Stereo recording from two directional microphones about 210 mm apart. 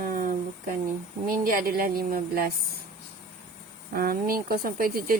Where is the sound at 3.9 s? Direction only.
45° right (ahead or behind).